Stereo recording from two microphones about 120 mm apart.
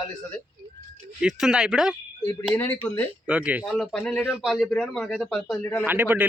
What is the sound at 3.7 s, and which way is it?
Speech, 5° left (ahead or behind).